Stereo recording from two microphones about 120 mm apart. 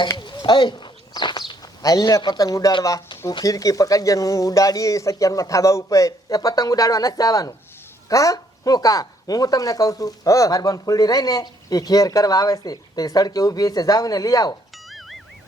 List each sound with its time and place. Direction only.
0.2 s speech: 40° left (ahead or behind)
14.8 s music: centre (ahead or behind)